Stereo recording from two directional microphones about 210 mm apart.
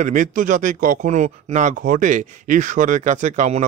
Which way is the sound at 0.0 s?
35° right (ahead or behind).